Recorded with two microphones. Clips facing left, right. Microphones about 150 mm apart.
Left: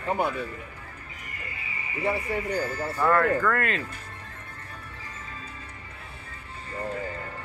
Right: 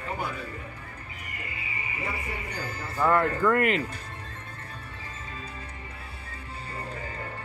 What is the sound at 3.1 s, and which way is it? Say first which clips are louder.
Speech: even; 20° right (ahead or behind).